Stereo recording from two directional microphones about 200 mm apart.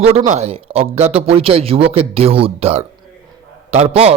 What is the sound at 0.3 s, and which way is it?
A man's voice, 35° right (ahead or behind).